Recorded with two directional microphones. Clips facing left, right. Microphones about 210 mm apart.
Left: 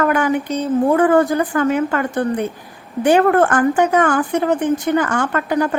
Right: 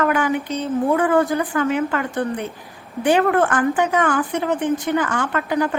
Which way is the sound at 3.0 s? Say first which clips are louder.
Left 4 dB; 45° left (ahead or behind).